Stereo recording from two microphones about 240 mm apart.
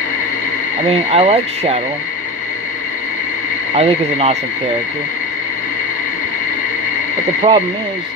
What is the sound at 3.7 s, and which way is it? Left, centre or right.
Speech, right.